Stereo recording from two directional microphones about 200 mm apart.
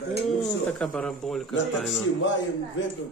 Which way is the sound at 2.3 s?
65° left (ahead or behind).